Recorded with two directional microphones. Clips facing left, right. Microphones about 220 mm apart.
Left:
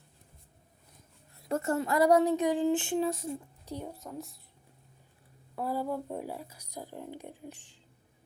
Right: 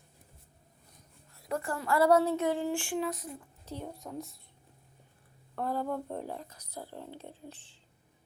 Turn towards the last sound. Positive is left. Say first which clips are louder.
# left 2 dB
turn(degrees=15)  # may be behind; listen again after turning